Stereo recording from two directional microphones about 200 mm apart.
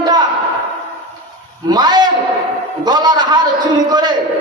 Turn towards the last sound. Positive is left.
turn(degrees=-20)  # may be behind; listen again after turning